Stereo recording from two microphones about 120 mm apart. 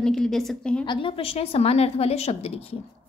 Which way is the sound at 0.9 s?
45° left (ahead or behind).